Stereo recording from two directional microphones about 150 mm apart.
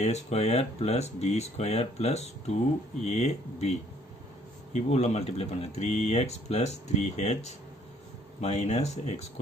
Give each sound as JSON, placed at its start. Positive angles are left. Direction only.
{"t": 0.0, "sound": "speech", "side_deg": 45}